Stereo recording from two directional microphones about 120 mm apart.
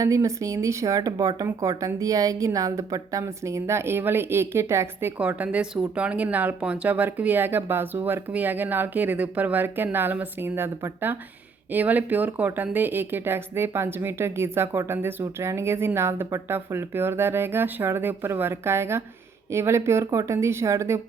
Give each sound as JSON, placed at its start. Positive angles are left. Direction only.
{"t": 0.0, "sound": "a woman's voice", "side_deg": -25}